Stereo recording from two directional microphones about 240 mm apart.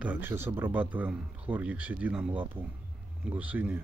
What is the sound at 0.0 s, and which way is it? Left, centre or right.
Speech, centre.